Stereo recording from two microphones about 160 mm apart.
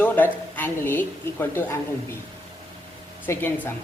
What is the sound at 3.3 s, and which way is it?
Speech, 10° left (ahead or behind).